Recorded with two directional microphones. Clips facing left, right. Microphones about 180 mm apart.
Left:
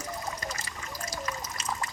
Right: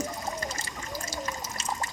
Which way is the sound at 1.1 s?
25° right (ahead or behind).